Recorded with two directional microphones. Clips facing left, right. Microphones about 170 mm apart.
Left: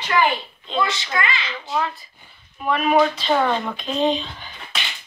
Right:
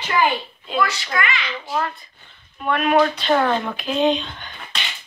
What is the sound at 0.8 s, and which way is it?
Speech, 20° left (ahead or behind).